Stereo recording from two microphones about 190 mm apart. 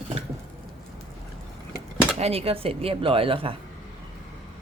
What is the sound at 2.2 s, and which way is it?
Speech, 30° right (ahead or behind).